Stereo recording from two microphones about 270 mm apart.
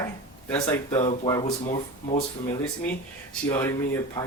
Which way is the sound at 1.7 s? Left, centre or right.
Left.